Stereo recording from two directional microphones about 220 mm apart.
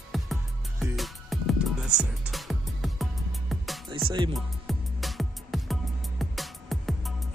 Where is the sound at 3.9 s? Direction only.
20° right (ahead or behind).